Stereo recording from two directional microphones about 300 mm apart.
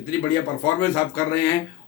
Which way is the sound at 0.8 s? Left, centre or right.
Centre.